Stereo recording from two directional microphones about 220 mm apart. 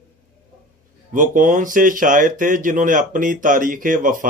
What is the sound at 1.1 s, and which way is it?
Speech, 35° right (ahead or behind).